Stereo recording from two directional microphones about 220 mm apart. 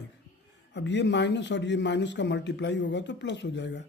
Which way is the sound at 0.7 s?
50° left (ahead or behind).